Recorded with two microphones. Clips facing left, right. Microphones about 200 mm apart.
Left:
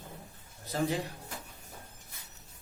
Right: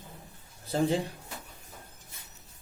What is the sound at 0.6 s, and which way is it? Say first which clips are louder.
Speech: right 4 dB; 30° right (ahead or behind).